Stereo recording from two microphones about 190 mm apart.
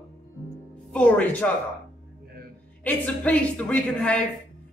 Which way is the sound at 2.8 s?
10° left (ahead or behind).